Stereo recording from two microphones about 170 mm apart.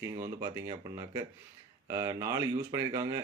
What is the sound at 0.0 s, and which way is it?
Speech, 20° right (ahead or behind).